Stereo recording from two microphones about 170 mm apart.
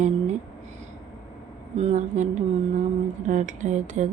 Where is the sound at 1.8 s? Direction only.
40° right (ahead or behind).